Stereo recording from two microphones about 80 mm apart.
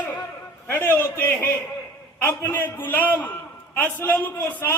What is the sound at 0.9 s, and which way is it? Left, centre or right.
A man's voice, left.